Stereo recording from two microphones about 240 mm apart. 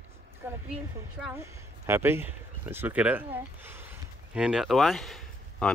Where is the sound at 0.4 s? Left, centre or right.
Centre.